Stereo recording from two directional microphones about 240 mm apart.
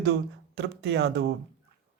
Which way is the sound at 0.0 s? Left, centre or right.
Right.